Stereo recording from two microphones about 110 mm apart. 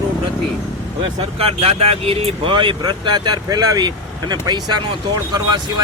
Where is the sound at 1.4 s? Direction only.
65° right (ahead or behind).